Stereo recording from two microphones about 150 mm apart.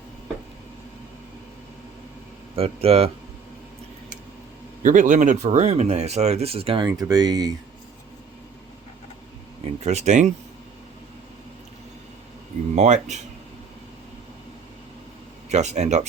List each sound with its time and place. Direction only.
2.6 s speech: 40° right (ahead or behind)
4.8 s speech: 60° right (ahead or behind); by 7.5 s 25° right (ahead or behind)
9.8 s speech: 50° right (ahead or behind)
12.7 s speech: 50° right (ahead or behind)
15.4 s speech: 50° right (ahead or behind)